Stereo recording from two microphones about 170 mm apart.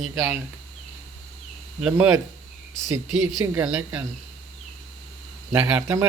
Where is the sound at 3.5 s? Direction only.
10° right (ahead or behind).